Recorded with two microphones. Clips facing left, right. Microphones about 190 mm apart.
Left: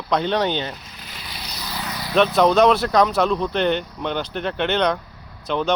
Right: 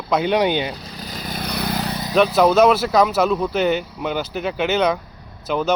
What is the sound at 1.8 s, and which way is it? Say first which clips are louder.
Vehicle: right 5 dB; 25° right (ahead or behind).